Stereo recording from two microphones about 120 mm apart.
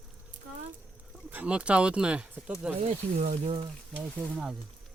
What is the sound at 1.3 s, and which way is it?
Speech, 10° right (ahead or behind).